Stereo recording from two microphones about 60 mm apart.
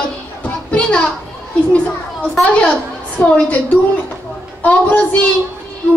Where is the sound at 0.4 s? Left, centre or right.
Left.